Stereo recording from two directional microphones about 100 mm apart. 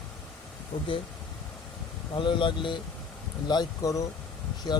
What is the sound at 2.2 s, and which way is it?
Speech, 55° left (ahead or behind).